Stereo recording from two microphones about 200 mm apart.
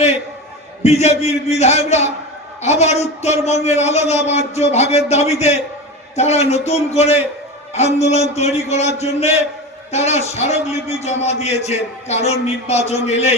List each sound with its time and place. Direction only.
0.8 s a man's voice: 35° left (ahead or behind)